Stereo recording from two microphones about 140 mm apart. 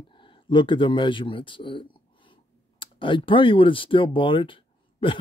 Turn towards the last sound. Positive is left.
turn(degrees=35)  # may be behind; listen again after turning